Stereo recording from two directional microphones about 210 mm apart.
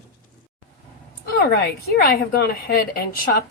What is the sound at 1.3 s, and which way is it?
A woman's voice, 45° left (ahead or behind).